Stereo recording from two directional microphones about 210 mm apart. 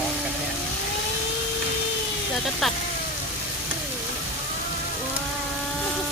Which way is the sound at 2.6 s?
Centre (ahead or behind).